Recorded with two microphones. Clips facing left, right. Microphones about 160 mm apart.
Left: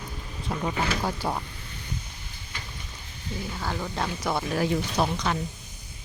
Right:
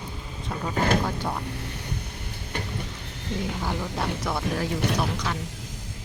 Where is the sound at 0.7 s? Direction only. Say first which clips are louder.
Right 9 dB; 50° right (ahead or behind).